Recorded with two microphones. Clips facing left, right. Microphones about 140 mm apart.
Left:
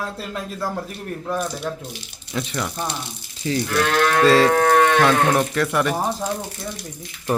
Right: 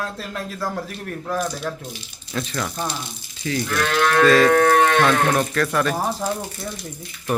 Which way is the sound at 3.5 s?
30° left (ahead or behind).